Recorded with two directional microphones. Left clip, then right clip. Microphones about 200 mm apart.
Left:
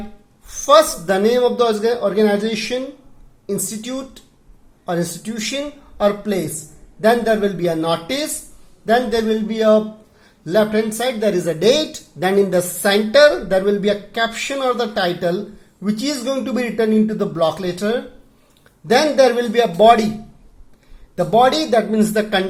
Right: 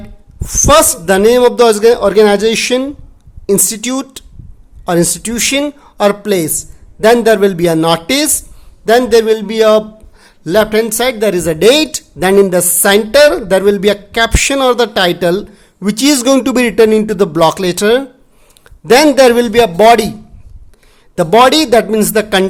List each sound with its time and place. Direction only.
0.4 s a man's voice: 40° right (ahead or behind)
21.2 s speech: 45° right (ahead or behind)